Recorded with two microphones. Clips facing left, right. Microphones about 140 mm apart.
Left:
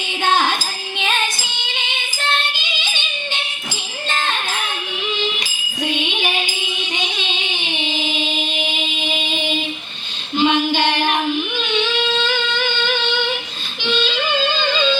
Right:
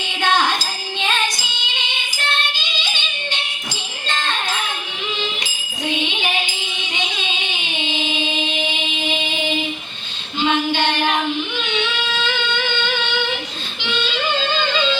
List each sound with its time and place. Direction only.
0.9 s music: 15° left (ahead or behind)
10.3 s female singing: 15° left (ahead or behind)